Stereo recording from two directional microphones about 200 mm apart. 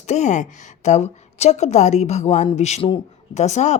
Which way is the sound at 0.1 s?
35° left (ahead or behind).